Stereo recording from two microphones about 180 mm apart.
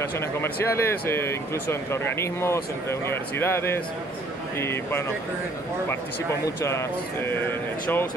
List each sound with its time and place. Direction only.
0.7 s speech: 15° left (ahead or behind)
6.4 s speech: 15° left (ahead or behind)